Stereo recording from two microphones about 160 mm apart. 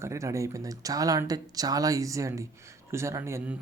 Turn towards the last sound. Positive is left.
turn(degrees=-15)  # may be behind; listen again after turning